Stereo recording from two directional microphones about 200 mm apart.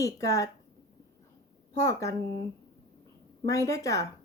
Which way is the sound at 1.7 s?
15° left (ahead or behind).